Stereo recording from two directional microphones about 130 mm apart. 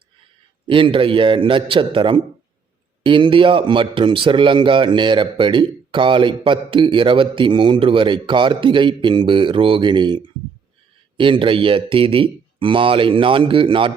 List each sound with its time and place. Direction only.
0.7 s speech: 40° right (ahead or behind)